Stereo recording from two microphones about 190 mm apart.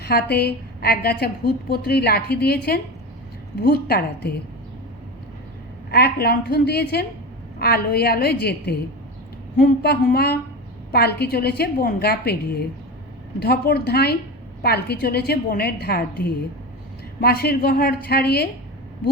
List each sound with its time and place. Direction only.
0.0 s a woman's voice: 55° left (ahead or behind)
5.9 s a woman's voice: 55° left (ahead or behind)